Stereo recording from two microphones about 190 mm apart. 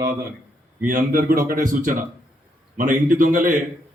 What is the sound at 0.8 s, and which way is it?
Speech, 45° right (ahead or behind).